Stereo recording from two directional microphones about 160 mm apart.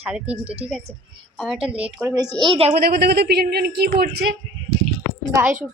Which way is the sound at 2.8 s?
80° right.